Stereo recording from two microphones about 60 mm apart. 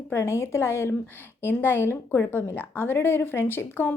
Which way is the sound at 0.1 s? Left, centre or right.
Left.